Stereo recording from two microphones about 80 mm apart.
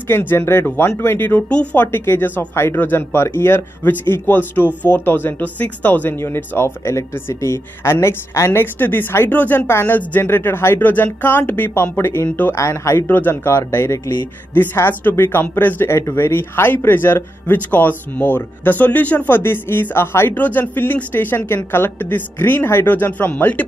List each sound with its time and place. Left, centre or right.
0.1 s speech: left